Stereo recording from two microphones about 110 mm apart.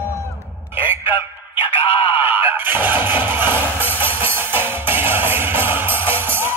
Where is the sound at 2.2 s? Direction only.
20° right (ahead or behind).